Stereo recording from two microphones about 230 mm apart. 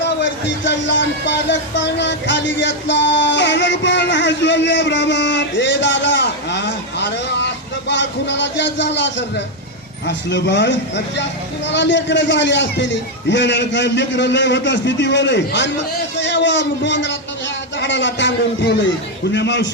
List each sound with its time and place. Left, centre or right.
0.0 s a man's voice: left